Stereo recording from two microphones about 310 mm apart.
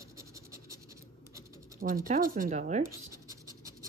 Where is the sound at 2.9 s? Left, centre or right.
Centre.